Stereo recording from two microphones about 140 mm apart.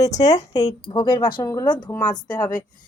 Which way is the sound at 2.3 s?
25° left (ahead or behind).